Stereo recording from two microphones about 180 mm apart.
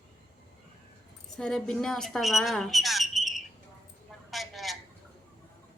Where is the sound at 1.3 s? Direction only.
5° left (ahead or behind).